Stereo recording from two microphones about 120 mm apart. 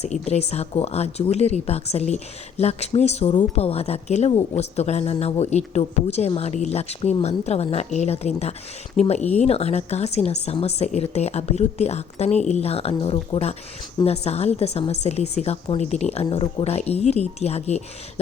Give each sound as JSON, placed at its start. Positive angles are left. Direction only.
{"t": 0.0, "sound": "speech", "side_deg": 65}